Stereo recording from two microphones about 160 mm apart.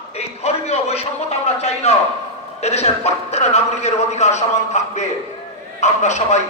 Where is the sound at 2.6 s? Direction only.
45° left (ahead or behind).